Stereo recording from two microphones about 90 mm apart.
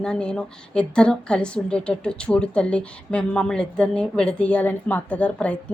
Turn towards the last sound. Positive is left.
turn(degrees=15)  # may be behind; listen again after turning